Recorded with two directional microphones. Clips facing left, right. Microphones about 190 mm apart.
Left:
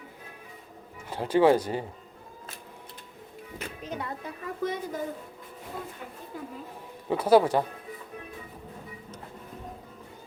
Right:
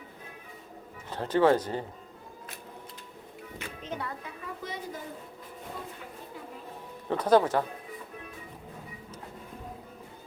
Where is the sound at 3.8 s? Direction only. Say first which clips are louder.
Left 1 dB; 20° left (ahead or behind).